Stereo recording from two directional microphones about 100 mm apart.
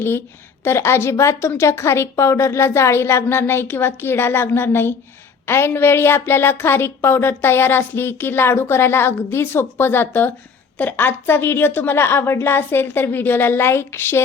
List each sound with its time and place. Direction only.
0.6 s a woman's voice: 25° left (ahead or behind)